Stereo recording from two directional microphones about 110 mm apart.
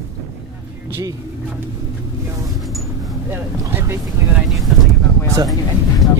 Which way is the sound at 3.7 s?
20° right (ahead or behind).